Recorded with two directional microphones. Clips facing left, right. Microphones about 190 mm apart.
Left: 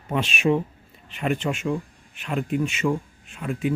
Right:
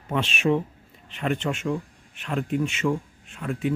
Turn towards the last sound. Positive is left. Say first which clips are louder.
# left 1 dB
turn(degrees=10)  # may be behind; listen again after turning